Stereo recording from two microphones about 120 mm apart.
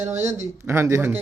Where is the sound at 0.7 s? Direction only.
25° right (ahead or behind).